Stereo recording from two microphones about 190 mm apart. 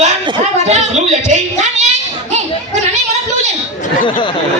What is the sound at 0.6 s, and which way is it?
Speech, 35° right (ahead or behind).